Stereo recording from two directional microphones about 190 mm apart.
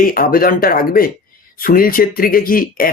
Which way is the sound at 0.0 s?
45° left (ahead or behind).